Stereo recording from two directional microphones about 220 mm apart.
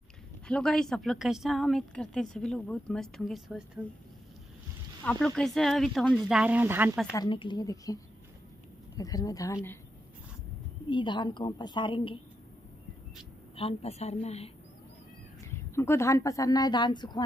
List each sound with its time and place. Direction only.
0.5 s a woman's voice: 5° left (ahead or behind)
5.0 s a woman's voice: centre (ahead or behind)
7.1 s speech: 20° left (ahead or behind)
10.9 s a woman's voice: 20° left (ahead or behind)
13.6 s a woman's voice: 25° left (ahead or behind)
15.4 s a woman's voice: 10° left (ahead or behind)